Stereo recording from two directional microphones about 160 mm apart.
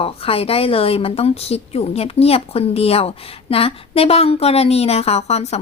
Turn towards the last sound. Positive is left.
turn(degrees=40)  # may be behind; listen again after turning